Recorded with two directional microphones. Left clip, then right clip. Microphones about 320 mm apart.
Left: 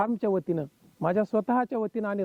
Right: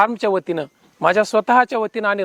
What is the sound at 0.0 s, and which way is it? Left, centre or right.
Speech, centre.